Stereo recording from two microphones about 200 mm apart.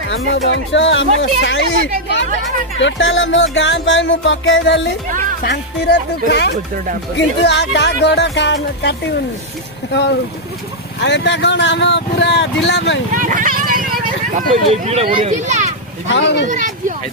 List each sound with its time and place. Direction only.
0.1 s speech: 65° left (ahead or behind)
1.4 s music: 70° left (ahead or behind)
2.0 s speech: 65° left (ahead or behind)
2.8 s music: 75° left (ahead or behind)
5.0 s speech: 40° right (ahead or behind)
5.4 s speech: 55° left (ahead or behind)
11.0 s speech: 60° left (ahead or behind)
13.1 s speech: 40° right (ahead or behind)
16.0 s speech: 60° left (ahead or behind)
16.5 s speech: 40° right (ahead or behind)